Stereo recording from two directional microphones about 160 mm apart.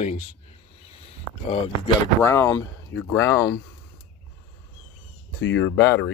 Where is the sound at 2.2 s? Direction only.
15° left (ahead or behind).